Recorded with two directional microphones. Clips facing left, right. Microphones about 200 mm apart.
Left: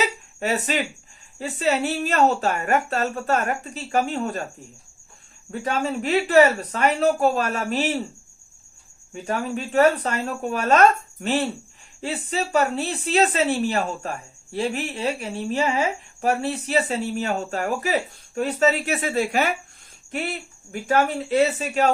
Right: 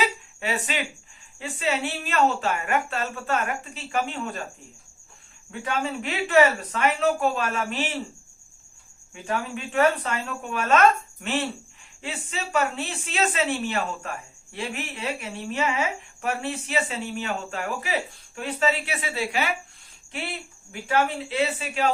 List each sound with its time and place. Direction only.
0.3 s speech: 40° left (ahead or behind)
5.5 s speech: 40° left (ahead or behind)
9.1 s speech: 40° left (ahead or behind)